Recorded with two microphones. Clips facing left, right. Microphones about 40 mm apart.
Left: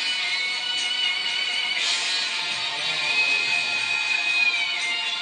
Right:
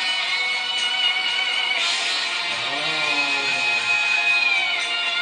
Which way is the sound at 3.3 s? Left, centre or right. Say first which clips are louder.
Right 2 dB; right.